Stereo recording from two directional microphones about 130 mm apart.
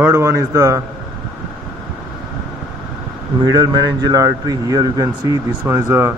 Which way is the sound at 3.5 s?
30° right (ahead or behind).